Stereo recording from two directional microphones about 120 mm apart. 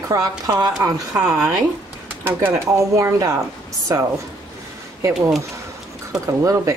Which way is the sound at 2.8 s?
30° right (ahead or behind).